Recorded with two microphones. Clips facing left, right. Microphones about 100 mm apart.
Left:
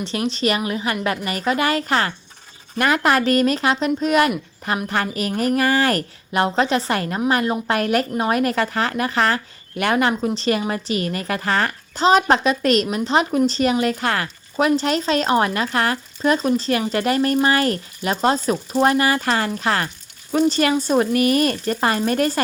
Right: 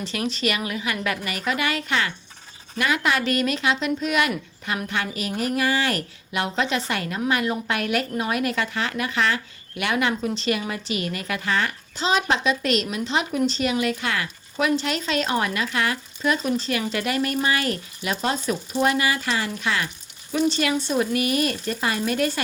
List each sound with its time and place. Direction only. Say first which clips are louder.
0.0 s a woman's voice: left 4 dB; 30° left (ahead or behind)